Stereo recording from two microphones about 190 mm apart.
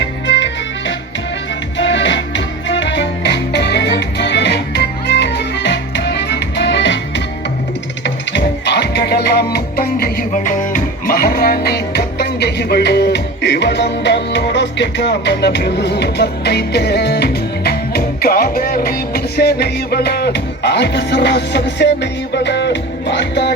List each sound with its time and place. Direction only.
0.0 s music: 70° left (ahead or behind)
8.0 s music: 65° left (ahead or behind)